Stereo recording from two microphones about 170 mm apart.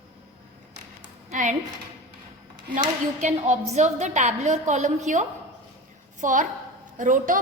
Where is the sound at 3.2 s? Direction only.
45° right (ahead or behind).